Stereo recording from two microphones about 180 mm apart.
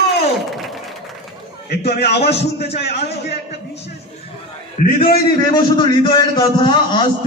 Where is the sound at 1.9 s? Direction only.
65° left (ahead or behind).